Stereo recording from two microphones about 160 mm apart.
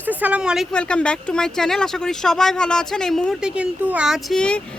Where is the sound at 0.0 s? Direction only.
10° right (ahead or behind).